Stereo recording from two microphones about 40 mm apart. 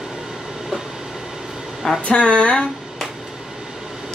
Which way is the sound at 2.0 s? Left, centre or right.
Left.